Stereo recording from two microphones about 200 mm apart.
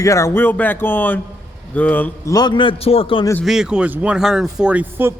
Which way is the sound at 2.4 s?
25° left (ahead or behind).